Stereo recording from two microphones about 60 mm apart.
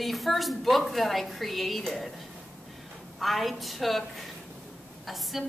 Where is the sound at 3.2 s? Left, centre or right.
Centre.